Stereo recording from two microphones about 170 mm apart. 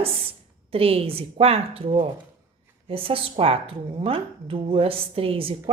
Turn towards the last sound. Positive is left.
turn(degrees=-35)  # may be behind; listen again after turning